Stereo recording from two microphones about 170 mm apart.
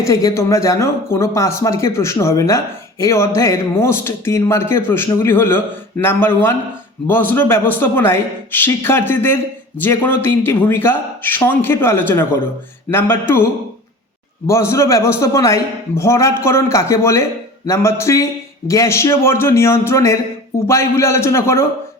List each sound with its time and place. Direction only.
0.0 s a man's voice: 20° left (ahead or behind)